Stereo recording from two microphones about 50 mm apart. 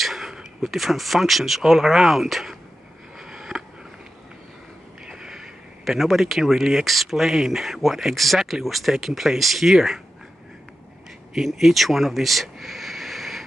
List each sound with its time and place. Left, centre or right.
0.0 s speech: centre
3.2 s a sound: centre
5.0 s speech: centre
11.3 s speech: centre